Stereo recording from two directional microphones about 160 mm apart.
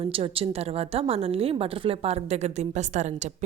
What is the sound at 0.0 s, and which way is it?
A woman's voice, 35° right (ahead or behind).